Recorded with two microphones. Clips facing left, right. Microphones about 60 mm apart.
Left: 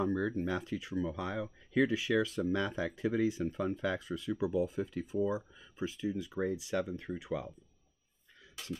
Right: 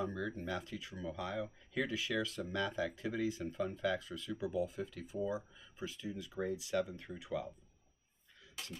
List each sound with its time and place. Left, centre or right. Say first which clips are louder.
0.0 s speech: left 7 dB; left